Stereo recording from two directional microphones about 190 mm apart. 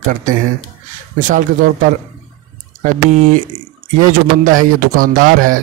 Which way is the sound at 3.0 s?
40° right (ahead or behind).